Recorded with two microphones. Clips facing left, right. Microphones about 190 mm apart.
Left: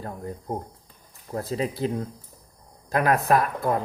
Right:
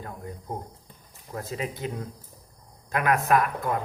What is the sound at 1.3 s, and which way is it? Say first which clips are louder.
Speech: left 5 dB; 35° left (ahead or behind).